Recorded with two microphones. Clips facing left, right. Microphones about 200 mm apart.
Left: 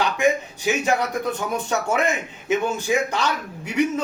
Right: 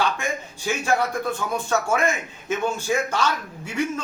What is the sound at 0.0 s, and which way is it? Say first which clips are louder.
A man's voice: left 5 dB; 15° left (ahead or behind).